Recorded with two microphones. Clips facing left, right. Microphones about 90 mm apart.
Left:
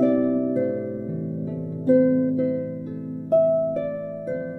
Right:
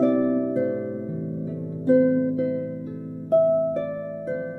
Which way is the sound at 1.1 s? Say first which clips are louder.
Left 1 dB; 10° right (ahead or behind).